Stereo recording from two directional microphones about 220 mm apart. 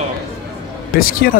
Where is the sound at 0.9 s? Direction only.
40° left (ahead or behind).